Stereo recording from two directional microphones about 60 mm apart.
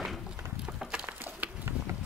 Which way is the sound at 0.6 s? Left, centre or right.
Centre.